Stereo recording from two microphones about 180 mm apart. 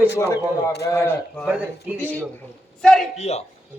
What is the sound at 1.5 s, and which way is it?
Speech, 10° right (ahead or behind).